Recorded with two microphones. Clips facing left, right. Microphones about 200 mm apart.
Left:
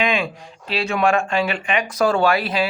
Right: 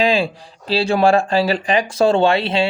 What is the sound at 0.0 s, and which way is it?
Speech, 30° right (ahead or behind).